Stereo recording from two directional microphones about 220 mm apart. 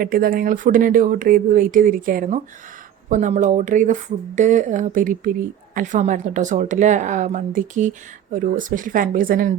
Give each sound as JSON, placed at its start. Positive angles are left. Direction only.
{"t": 0.0, "sound": "a woman's voice", "side_deg": -40}